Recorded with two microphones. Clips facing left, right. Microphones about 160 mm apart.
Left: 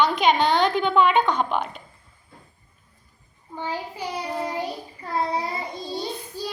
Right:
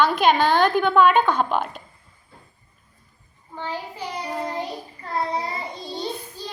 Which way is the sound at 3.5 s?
15° left (ahead or behind).